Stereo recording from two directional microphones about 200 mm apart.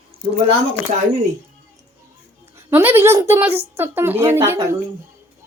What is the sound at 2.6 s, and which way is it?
A child's voice, 10° right (ahead or behind).